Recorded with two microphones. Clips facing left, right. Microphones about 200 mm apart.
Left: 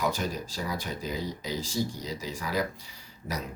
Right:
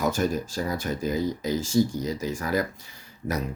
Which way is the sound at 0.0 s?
45° right (ahead or behind).